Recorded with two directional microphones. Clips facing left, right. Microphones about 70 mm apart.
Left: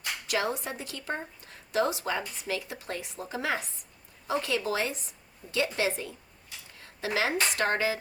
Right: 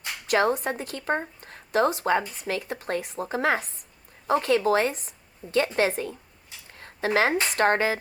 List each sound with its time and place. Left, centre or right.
0.3 s a woman's voice: right
6.7 s a sound: right
7.5 s speech: right